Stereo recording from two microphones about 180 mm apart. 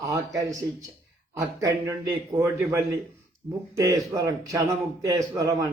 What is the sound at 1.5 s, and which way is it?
A man's voice, 15° right (ahead or behind).